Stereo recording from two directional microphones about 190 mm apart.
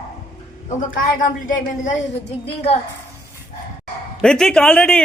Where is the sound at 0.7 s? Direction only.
45° left (ahead or behind).